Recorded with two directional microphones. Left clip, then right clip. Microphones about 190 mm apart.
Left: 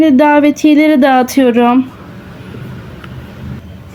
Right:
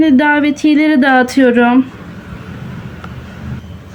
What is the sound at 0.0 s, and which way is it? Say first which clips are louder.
Speech: left 3 dB; 30° left (ahead or behind).